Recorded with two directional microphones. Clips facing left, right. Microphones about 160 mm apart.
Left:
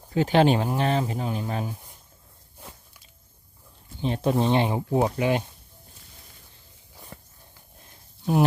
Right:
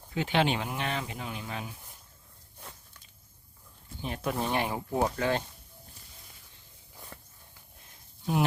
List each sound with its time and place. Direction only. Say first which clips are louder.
0.1 s speech: left 8 dB; 40° left (ahead or behind)
2.6 s a sound: left 3 dB; 5° left (ahead or behind)
4.0 s speech: left 9 dB; 30° left (ahead or behind)
8.2 s speech: left 6 dB; 40° left (ahead or behind)